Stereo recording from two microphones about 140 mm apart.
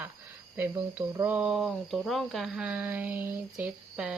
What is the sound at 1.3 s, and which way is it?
Speech, 5° right (ahead or behind).